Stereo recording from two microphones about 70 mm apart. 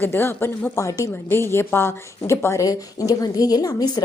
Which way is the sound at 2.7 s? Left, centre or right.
Left.